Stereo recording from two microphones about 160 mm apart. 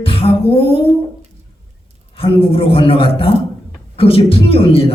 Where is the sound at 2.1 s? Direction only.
35° left (ahead or behind).